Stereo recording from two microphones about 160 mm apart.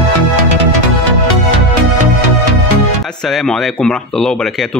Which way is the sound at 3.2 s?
Centre (ahead or behind).